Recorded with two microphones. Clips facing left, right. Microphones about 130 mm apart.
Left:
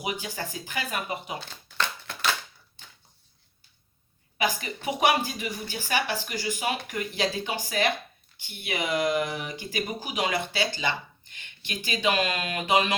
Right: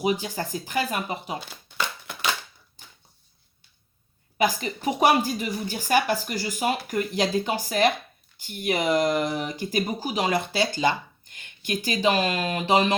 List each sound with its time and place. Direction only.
0.0 s speech: 35° right (ahead or behind)
1.8 s a sound: 10° right (ahead or behind)
4.4 s speech: 40° right (ahead or behind)